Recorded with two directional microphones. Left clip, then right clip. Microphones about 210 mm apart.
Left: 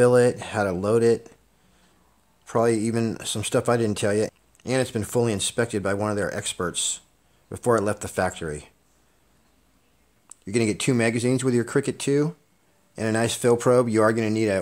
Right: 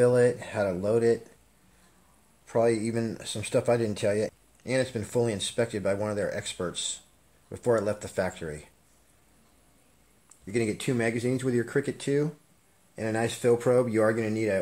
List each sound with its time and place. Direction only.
0.0 s speech: 40° left (ahead or behind)
2.4 s speech: 40° left (ahead or behind)
10.2 s speech: 45° left (ahead or behind)